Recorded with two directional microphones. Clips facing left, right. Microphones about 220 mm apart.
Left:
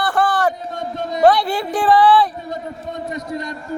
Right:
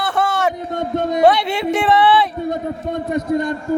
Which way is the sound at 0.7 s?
55° right (ahead or behind).